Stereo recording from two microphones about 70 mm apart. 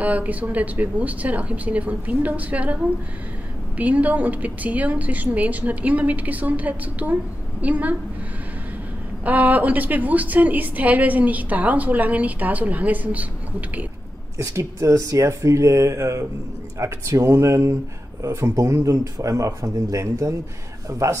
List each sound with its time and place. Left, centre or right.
0.0 s a woman's voice: right
9.2 s a woman's voice: right
14.4 s a man's voice: right